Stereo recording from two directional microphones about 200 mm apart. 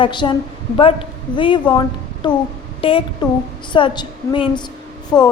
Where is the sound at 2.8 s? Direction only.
25° left (ahead or behind).